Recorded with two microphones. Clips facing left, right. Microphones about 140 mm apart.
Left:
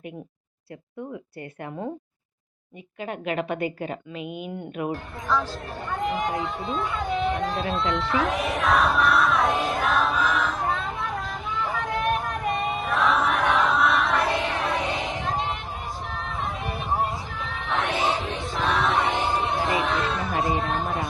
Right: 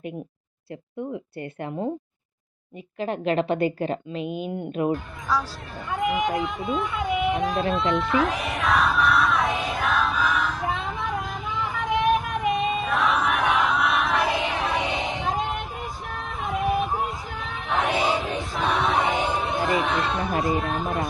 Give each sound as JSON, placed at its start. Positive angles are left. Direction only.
{"t": 3.0, "sound": "a woman's voice", "side_deg": -30}
{"t": 5.9, "sound": "speech", "side_deg": 0}
{"t": 7.9, "sound": "speech", "side_deg": -20}
{"t": 8.1, "sound": "music", "side_deg": 0}
{"t": 16.0, "sound": "a sound", "side_deg": 0}
{"t": 20.6, "sound": "chatter", "side_deg": 0}